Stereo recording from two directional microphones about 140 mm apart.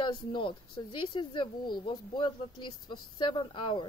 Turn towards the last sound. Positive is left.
turn(degrees=35)  # may be behind; listen again after turning